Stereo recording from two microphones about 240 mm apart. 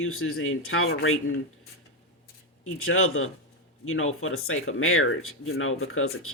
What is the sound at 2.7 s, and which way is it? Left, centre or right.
Speech, left.